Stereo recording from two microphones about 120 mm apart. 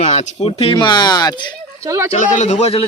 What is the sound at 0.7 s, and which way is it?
Speech, 40° left (ahead or behind).